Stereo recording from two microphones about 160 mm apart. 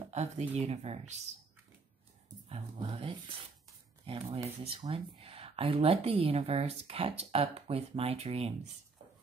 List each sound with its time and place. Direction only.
0.1 s speech: 45° right (ahead or behind)
2.5 s speech: 35° right (ahead or behind)